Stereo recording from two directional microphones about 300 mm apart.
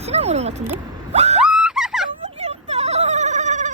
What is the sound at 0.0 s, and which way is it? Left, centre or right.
Speech, right.